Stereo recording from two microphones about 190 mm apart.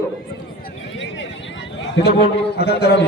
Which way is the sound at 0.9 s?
75° left (ahead or behind).